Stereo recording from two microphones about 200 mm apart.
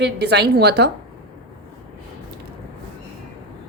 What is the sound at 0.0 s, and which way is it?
Speech, 55° right (ahead or behind).